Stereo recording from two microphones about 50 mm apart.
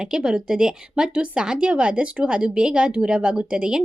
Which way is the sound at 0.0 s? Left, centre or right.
Centre.